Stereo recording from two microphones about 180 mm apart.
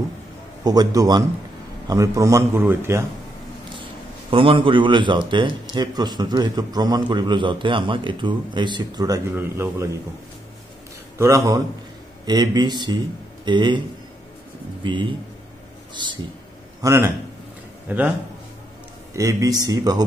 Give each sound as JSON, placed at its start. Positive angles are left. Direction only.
{"t": 0.7, "sound": "a man's voice", "side_deg": -20}
{"t": 4.3, "sound": "a man's voice", "side_deg": -30}
{"t": 11.1, "sound": "a man's voice", "side_deg": -15}
{"t": 16.8, "sound": "a man's voice", "side_deg": -15}
{"t": 19.1, "sound": "a man's voice", "side_deg": -20}